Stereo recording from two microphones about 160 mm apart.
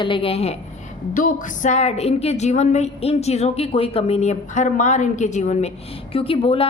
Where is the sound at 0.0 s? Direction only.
35° left (ahead or behind).